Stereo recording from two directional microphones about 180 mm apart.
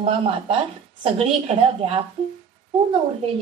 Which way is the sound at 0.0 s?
30° right (ahead or behind).